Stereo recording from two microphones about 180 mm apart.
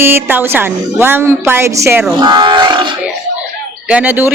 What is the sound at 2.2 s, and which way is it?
Livestock, 25° right (ahead or behind).